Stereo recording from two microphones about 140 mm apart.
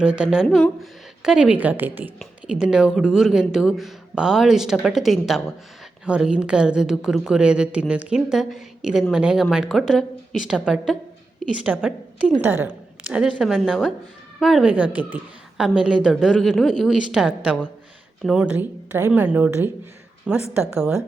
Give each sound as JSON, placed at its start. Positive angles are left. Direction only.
{"t": 0.0, "sound": "a woman's voice", "side_deg": -5}